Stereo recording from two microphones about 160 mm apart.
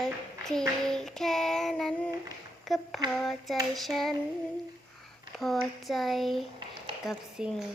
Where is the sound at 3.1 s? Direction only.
Centre (ahead or behind).